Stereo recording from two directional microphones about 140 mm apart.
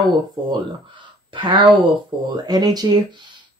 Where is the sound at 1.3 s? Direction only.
35° right (ahead or behind).